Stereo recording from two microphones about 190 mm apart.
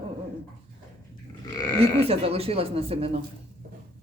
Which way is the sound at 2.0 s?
30° right (ahead or behind).